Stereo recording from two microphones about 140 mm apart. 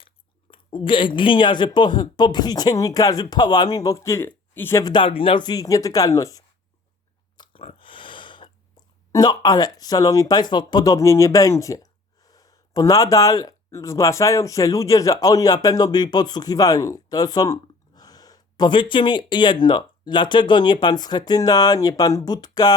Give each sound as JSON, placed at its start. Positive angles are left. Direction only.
{"t": 0.5, "sound": "speech", "side_deg": 35}
{"t": 4.8, "sound": "speech", "side_deg": 35}
{"t": 7.3, "sound": "a sound", "side_deg": 35}
{"t": 9.1, "sound": "speech", "side_deg": 30}